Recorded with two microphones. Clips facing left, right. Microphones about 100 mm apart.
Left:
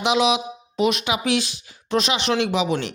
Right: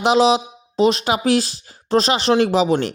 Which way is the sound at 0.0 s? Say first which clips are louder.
Right 5 dB; 35° right (ahead or behind).